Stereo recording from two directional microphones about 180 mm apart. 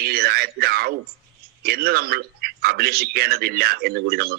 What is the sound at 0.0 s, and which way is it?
A man's voice, 60° right (ahead or behind).